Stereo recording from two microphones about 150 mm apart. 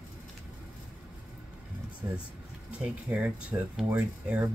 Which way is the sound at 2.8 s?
10° right (ahead or behind).